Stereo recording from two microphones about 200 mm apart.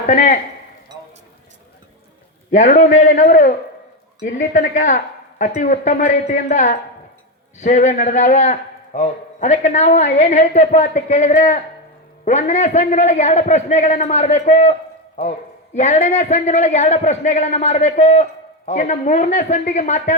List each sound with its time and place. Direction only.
0.1 s a man's voice: 40° left (ahead or behind)
2.5 s a man's voice: 40° left (ahead or behind)